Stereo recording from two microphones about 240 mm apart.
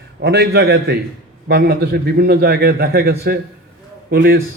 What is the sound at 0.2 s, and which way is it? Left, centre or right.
A man's voice, right.